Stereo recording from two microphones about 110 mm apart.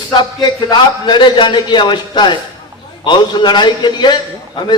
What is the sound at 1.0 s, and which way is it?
A man's voice, 45° left (ahead or behind).